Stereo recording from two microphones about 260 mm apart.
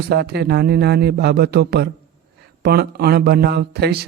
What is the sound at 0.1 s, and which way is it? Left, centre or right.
Speech, right.